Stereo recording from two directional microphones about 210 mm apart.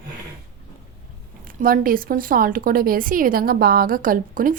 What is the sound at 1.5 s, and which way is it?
A woman's voice, 40° right (ahead or behind).